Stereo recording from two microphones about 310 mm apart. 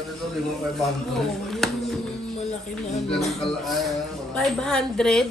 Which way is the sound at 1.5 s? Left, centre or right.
Centre.